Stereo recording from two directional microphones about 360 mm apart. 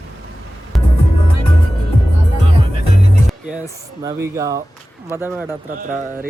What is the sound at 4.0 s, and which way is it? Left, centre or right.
A man's voice, centre.